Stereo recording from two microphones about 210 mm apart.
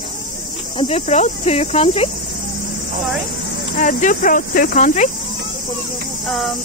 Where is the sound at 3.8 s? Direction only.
35° left (ahead or behind).